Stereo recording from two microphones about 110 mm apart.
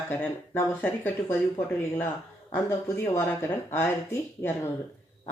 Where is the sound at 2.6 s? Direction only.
20° left (ahead or behind).